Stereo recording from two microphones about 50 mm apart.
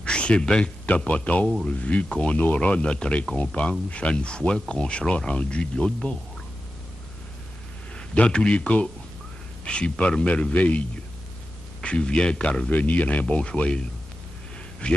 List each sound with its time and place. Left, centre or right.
0.0 s a sound: left
0.8 s speech: left
7.9 s a man's voice: left